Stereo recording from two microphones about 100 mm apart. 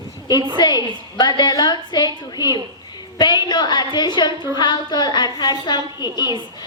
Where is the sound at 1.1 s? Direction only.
45° left (ahead or behind).